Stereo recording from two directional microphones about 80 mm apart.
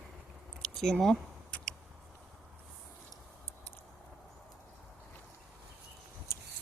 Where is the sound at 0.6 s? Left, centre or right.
Centre.